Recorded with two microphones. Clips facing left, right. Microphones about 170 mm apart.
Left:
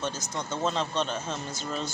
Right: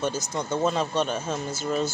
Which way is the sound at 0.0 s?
10° right (ahead or behind).